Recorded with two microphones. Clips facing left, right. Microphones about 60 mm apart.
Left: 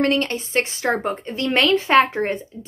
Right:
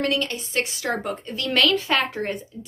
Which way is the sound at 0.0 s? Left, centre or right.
Left.